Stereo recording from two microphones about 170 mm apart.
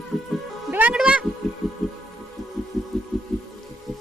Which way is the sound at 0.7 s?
5° right (ahead or behind).